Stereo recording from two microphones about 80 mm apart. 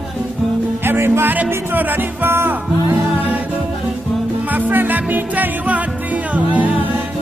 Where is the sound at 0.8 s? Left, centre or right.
Right.